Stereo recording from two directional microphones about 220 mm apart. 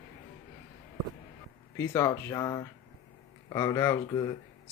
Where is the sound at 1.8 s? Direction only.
15° left (ahead or behind).